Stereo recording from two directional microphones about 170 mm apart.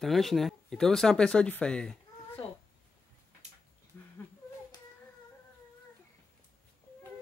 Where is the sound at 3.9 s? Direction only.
10° left (ahead or behind).